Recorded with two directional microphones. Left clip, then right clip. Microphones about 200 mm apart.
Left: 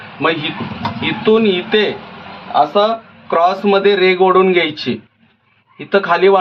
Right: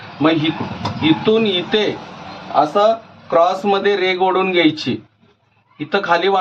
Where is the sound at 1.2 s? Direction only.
30° left (ahead or behind).